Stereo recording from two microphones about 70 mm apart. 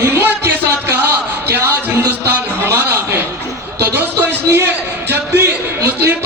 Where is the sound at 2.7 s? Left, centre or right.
Right.